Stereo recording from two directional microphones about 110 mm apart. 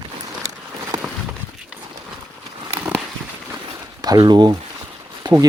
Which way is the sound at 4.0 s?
40° right (ahead or behind).